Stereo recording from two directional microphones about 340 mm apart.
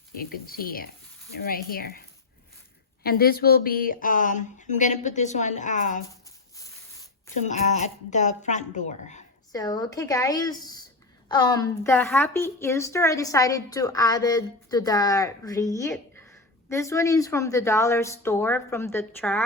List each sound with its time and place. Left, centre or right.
0.1 s a woman's voice: left
7.4 s a woman's voice: left; by 19.5 s centre